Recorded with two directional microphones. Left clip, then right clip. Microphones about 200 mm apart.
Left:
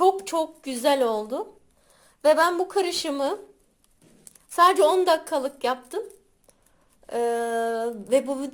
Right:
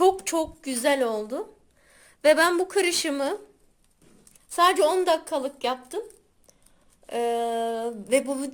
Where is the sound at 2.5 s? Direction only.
10° right (ahead or behind).